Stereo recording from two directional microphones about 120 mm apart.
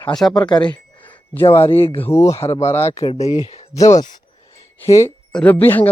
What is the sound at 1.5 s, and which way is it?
Speech, 20° left (ahead or behind).